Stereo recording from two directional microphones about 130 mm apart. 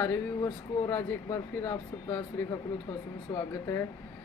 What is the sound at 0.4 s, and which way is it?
Speech, 25° left (ahead or behind).